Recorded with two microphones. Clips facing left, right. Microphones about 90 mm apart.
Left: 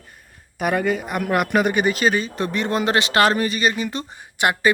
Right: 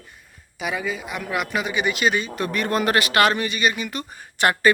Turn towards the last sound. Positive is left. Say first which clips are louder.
# right 1 dB
turn(degrees=15)  # may be behind; listen again after turning